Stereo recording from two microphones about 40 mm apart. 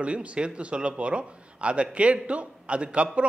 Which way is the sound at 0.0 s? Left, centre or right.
Right.